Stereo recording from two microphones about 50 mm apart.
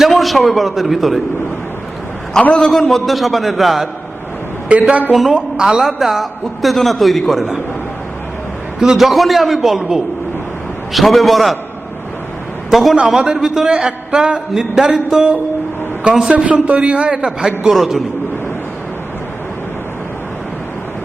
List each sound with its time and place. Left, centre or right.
0.0 s a man's voice: centre
2.6 s a man's voice: centre
4.7 s a man's voice: right
5.3 s a man's voice: centre
8.8 s a man's voice: centre
12.7 s a man's voice: centre; by 17.5 s right
17.7 s a man's voice: centre